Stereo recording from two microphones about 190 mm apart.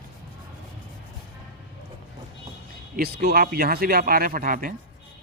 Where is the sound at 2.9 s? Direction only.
55° right (ahead or behind).